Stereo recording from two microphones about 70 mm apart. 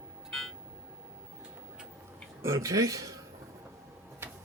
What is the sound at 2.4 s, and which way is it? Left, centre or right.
Speech, right.